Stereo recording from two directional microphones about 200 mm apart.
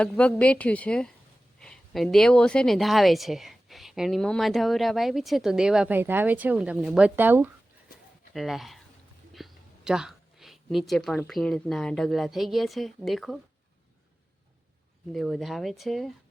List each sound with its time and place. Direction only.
0.0 s a woman's voice: 5° left (ahead or behind)
15.1 s a woman's voice: centre (ahead or behind)